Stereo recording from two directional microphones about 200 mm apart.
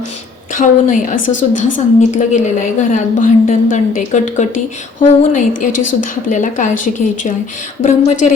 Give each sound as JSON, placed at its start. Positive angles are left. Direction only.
{"t": 0.5, "sound": "a woman's voice", "side_deg": 40}